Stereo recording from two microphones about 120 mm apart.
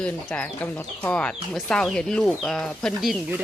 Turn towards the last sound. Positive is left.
turn(degrees=0)  # may be behind; listen again after turning